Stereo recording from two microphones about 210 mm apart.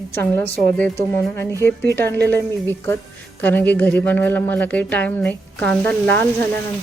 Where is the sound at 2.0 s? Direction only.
50° right (ahead or behind).